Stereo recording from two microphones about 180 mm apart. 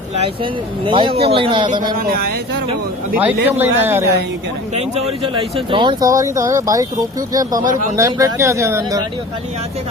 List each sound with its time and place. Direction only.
0.4 s speech: 30° right (ahead or behind)
2.0 s speech: 55° right (ahead or behind)
3.2 s speech: 10° right (ahead or behind)
4.7 s speech: 35° right (ahead or behind); by 7.6 s 20° right (ahead or behind)
7.6 s speech: 45° right (ahead or behind)
7.9 s speech: 15° right (ahead or behind)